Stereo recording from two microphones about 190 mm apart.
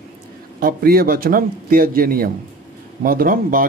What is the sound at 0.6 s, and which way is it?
A man's voice, 50° right (ahead or behind).